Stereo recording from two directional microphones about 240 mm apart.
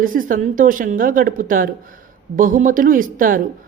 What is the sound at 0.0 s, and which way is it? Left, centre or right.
Speech, right.